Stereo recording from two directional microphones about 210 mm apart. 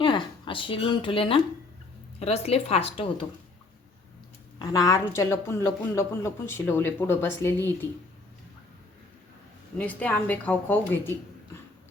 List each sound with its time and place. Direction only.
0.0 s a woman's voice: 25° left (ahead or behind)
4.6 s a woman's voice: 15° left (ahead or behind)
9.7 s a woman's voice: 5° left (ahead or behind)